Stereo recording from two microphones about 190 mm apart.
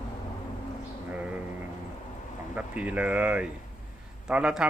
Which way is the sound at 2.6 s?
5° right (ahead or behind).